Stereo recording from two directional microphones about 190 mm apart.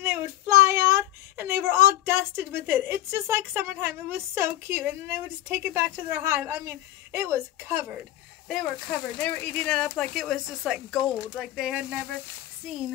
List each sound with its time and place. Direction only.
0.0 s a sound: 10° right (ahead or behind)
5.5 s a woman's voice: 10° right (ahead or behind)
8.5 s speech: centre (ahead or behind)